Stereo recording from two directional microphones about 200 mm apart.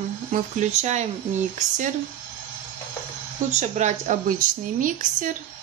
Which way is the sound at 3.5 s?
35° right (ahead or behind).